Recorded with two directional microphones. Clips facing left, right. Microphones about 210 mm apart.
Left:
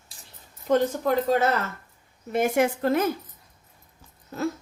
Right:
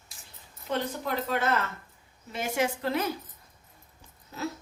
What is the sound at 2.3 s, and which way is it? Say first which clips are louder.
Speech: left 7 dB; 55° left (ahead or behind).